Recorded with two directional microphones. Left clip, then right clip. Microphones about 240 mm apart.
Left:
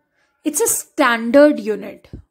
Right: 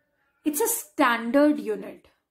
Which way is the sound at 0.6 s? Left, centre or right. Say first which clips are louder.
Left 7 dB; left.